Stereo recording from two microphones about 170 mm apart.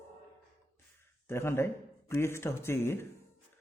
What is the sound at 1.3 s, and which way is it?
Speech, 15° left (ahead or behind).